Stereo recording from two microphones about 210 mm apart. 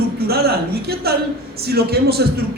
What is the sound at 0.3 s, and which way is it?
A woman's voice, 50° right (ahead or behind).